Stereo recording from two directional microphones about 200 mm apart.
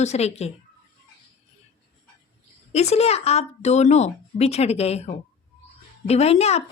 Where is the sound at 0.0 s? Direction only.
35° left (ahead or behind).